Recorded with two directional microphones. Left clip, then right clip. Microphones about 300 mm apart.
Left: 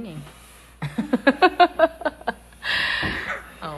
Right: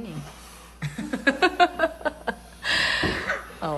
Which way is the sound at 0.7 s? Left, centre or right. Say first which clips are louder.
Left 6 dB; centre.